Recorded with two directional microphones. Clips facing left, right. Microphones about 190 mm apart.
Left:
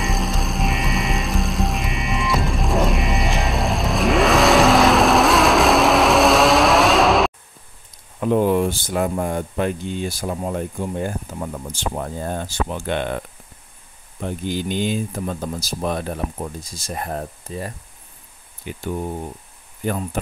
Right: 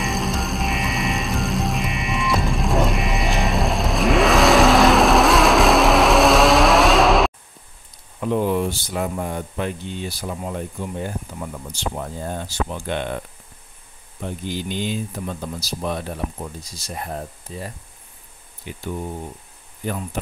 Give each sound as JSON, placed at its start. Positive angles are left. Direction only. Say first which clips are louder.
{"t": 0.0, "sound": "music", "louder": "even", "side_deg": 0}
{"t": 8.2, "sound": "speech", "louder": "left 3 dB", "side_deg": 50}
{"t": 14.2, "sound": "speech", "louder": "left 3 dB", "side_deg": 50}